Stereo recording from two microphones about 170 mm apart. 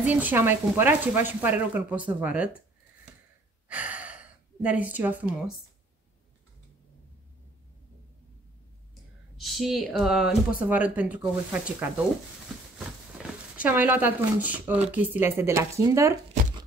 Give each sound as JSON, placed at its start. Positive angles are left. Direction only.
{"t": 0.0, "sound": "speech", "side_deg": -10}
{"t": 3.6, "sound": "gasp", "side_deg": -10}
{"t": 9.4, "sound": "speech", "side_deg": 0}
{"t": 13.6, "sound": "speech", "side_deg": -10}